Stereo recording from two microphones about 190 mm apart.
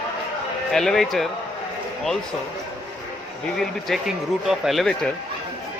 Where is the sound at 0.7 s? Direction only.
Centre (ahead or behind).